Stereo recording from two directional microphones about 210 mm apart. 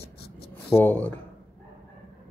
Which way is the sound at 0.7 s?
10° left (ahead or behind).